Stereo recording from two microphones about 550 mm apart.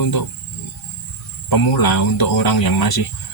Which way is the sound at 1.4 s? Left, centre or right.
Left.